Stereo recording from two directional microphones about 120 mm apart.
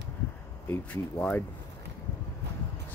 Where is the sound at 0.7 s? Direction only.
15° left (ahead or behind).